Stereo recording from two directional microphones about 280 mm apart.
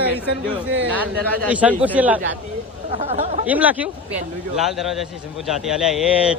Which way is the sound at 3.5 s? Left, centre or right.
Centre.